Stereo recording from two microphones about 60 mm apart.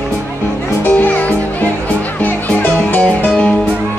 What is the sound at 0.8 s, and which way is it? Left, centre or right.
Music, left.